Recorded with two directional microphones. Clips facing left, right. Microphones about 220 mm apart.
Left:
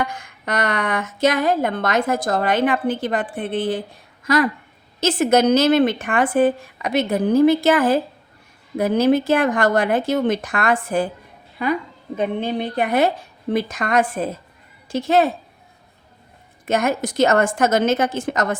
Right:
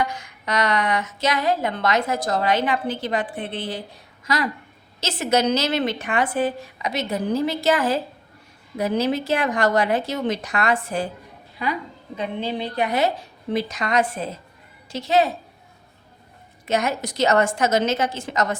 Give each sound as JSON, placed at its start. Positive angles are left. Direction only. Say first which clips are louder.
{"t": 0.0, "sound": "a woman's voice", "louder": "left 1 dB", "side_deg": 50}
{"t": 16.6, "sound": "a woman's voice", "louder": "left 3 dB", "side_deg": 50}